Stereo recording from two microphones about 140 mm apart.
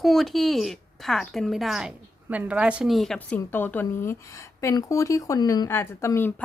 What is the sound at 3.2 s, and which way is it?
A woman's voice, 15° left (ahead or behind).